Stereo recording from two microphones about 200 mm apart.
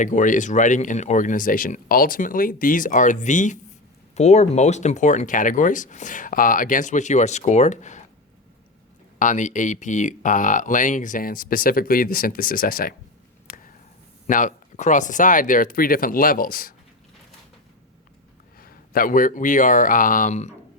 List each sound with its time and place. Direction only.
0.0 s speech: 40° left (ahead or behind)
9.1 s speech: 40° left (ahead or behind)
14.3 s speech: 40° left (ahead or behind)
18.6 s speech: 45° left (ahead or behind)